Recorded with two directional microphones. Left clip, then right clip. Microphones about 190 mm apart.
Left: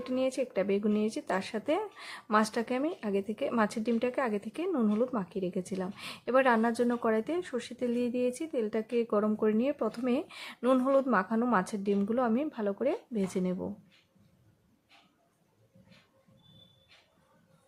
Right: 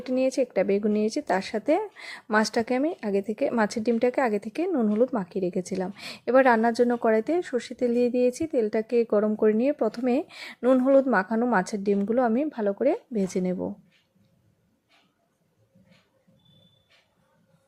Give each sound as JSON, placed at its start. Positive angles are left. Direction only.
{"t": 0.0, "sound": "speech", "side_deg": -25}